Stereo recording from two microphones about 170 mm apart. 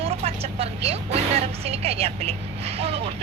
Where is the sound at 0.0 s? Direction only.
35° right (ahead or behind).